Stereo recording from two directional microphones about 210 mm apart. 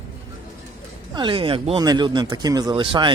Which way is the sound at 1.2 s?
25° right (ahead or behind).